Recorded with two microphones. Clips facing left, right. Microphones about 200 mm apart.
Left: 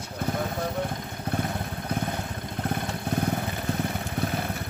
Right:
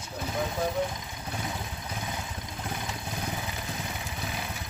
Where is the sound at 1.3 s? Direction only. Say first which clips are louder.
Left 6 dB; 60° left (ahead or behind).